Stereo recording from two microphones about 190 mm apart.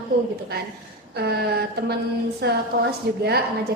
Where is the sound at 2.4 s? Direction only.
60° right (ahead or behind).